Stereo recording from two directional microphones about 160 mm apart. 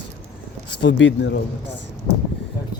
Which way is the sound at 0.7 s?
90° left.